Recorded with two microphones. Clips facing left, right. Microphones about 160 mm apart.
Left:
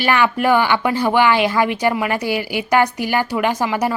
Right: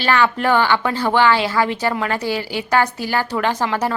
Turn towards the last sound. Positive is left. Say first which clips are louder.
# left 1 dB
turn(degrees=10)  # may be behind; listen again after turning